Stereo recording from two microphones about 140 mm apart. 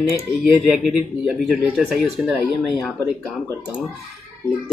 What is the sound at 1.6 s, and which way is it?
Mantra, 5° right (ahead or behind).